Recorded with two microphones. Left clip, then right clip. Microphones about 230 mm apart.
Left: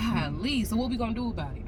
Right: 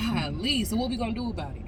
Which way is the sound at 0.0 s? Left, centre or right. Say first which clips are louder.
Right 1 dB; centre.